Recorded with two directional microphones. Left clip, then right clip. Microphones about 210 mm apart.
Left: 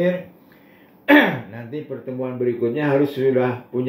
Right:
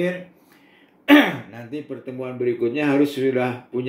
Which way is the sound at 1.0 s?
50° right (ahead or behind).